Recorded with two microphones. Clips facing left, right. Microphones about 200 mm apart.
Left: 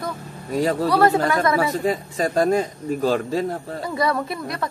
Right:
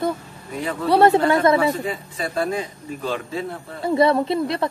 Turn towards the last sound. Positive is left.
turn(degrees=-25)  # may be behind; listen again after turning